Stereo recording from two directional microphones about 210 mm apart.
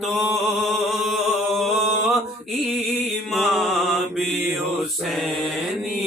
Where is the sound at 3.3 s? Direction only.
Centre (ahead or behind).